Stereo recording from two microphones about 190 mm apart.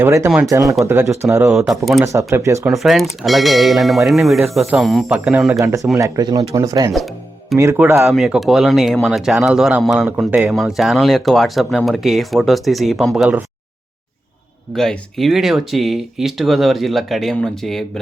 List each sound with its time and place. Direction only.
0.0 s speech: 15° right (ahead or behind)
0.3 s speech: 5° right (ahead or behind)
0.9 s speech: 15° right (ahead or behind)
1.5 s speech: centre (ahead or behind)
2.0 s speech: 15° right (ahead or behind)
2.6 s speech: centre (ahead or behind)
5.5 s speech: 15° right (ahead or behind)
8.1 s speech: centre (ahead or behind)
14.8 s speech: centre (ahead or behind)